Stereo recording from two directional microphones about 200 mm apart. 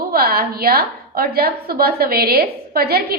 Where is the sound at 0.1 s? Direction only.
50° right (ahead or behind).